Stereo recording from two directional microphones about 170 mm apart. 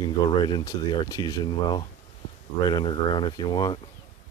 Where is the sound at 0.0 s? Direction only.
30° left (ahead or behind).